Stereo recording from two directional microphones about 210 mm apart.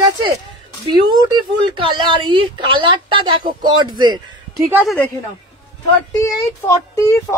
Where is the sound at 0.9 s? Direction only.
20° right (ahead or behind).